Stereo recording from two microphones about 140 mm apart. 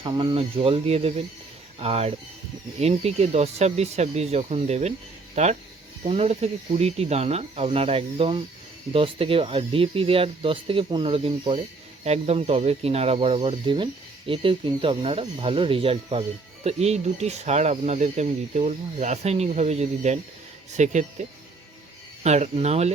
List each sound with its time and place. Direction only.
0.0 s speech: 35° right (ahead or behind)